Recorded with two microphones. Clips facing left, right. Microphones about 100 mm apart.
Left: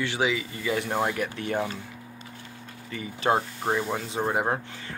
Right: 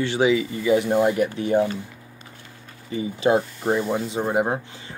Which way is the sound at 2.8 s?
20° right (ahead or behind).